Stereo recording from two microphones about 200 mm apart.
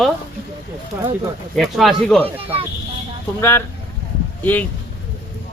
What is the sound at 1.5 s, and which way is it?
Speech, centre (ahead or behind).